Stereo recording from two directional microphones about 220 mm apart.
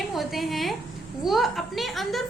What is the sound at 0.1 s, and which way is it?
A woman's voice, centre (ahead or behind).